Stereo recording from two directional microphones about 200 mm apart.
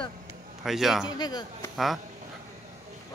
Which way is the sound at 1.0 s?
20° left (ahead or behind).